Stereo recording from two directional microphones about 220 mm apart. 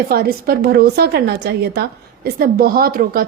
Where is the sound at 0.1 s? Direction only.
45° right (ahead or behind).